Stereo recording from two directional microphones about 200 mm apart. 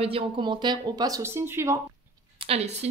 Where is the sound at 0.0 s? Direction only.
25° right (ahead or behind).